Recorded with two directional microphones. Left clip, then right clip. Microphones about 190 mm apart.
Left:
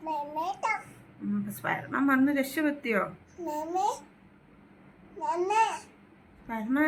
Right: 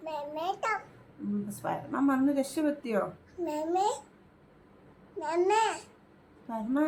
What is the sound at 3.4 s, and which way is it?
Speech, 10° right (ahead or behind).